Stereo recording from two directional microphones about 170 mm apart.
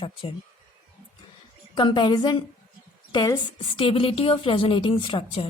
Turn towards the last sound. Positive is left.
turn(degrees=35)  # may be behind; listen again after turning